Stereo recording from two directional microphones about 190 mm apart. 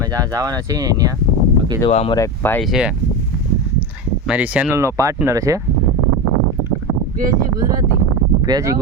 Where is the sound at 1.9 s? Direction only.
35° left (ahead or behind).